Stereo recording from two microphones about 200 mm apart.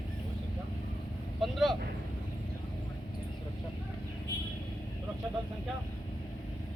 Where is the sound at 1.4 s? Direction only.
Centre (ahead or behind).